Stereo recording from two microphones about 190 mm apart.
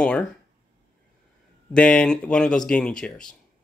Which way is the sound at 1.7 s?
5° left (ahead or behind).